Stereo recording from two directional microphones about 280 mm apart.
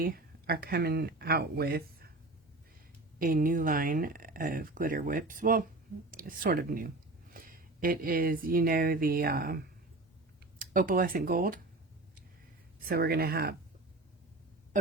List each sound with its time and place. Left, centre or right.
0.0 s speech: right
3.2 s speech: right
10.6 s speech: right
12.8 s speech: right